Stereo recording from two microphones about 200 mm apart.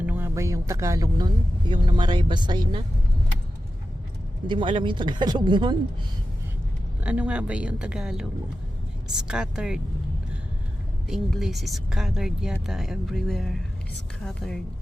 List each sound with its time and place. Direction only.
0.0 s speech: 10° right (ahead or behind)
4.4 s speech: 25° right (ahead or behind)
7.0 s speech: 5° right (ahead or behind)
11.1 s speech: centre (ahead or behind)